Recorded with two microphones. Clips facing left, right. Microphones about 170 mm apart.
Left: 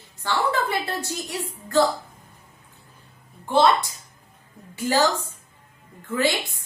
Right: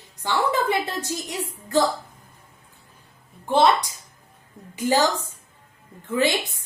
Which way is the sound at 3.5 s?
20° right (ahead or behind).